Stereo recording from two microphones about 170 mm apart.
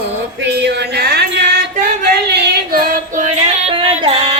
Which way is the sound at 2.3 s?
65° right (ahead or behind).